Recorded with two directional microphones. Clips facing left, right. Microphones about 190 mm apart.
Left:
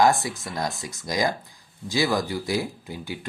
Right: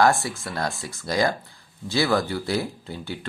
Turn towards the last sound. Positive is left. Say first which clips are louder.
# right 1 dB
turn(degrees=15)  # may be behind; listen again after turning